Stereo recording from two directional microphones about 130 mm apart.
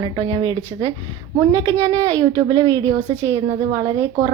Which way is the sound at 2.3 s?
35° right (ahead or behind).